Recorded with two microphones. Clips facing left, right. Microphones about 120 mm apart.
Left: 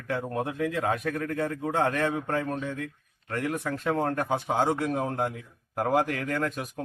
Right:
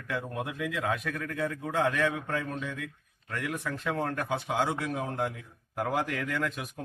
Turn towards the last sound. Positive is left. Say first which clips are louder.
# left 3 dB
turn(degrees=40)  # may be behind; listen again after turning